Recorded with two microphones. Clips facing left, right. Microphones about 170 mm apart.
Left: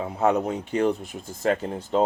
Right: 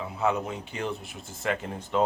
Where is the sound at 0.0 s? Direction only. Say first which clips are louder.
Left 5 dB; 45° left (ahead or behind).